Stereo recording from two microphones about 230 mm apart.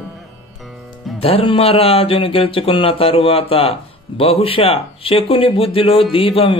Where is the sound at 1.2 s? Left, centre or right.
Left.